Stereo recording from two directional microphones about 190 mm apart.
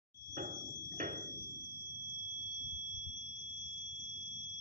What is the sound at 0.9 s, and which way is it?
Hammer, 45° right (ahead or behind).